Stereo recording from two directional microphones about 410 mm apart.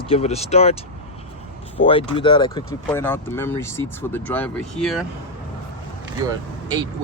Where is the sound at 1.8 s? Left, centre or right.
Centre.